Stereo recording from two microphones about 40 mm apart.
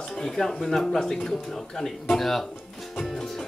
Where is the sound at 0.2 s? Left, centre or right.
Centre.